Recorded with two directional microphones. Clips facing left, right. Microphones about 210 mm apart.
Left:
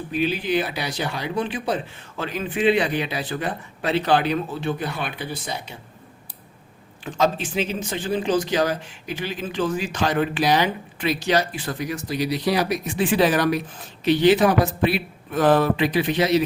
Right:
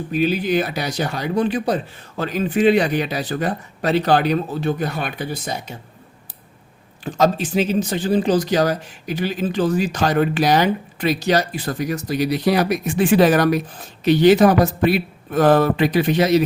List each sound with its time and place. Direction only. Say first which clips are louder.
0.1 s speech: right 4 dB; 40° right (ahead or behind)
7.0 s speech: right 4 dB; 40° right (ahead or behind)